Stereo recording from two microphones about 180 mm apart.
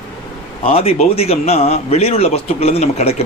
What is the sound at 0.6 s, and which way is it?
A man's voice, 35° left (ahead or behind).